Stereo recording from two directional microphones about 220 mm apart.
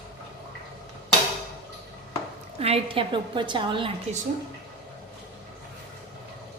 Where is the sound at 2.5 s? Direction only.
25° right (ahead or behind).